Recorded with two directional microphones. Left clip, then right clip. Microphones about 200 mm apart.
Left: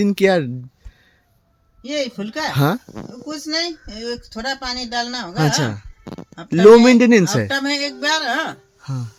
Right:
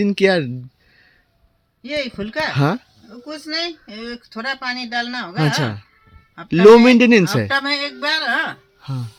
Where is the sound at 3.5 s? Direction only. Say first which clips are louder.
Left 1 dB; 40° left (ahead or behind).